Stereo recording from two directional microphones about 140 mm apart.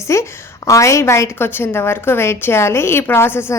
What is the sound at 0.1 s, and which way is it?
A woman's voice, 20° left (ahead or behind).